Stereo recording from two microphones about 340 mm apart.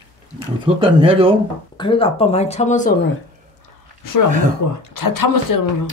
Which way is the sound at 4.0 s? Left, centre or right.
Left.